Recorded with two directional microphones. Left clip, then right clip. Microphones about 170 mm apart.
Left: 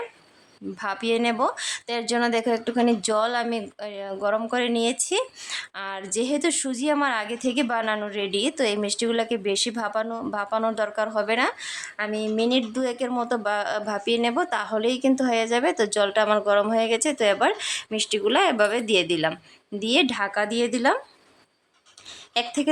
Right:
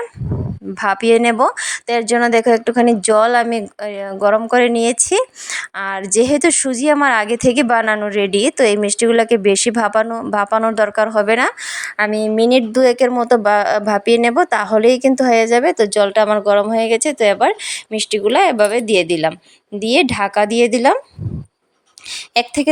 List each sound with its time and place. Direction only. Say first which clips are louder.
0.8 s speech: right 12 dB; 40° right (ahead or behind)
22.1 s a woman's voice: right 9 dB; 30° right (ahead or behind)